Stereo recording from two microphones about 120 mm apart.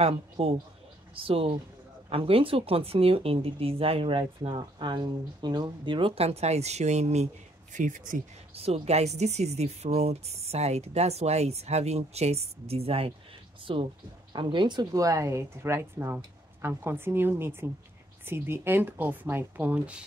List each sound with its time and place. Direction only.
0.0 s speech: 50° right (ahead or behind); by 7.2 s 70° right (ahead or behind)
7.7 s speech: 90° right
8.5 s speech: 55° right (ahead or behind); by 20.0 s 15° right (ahead or behind)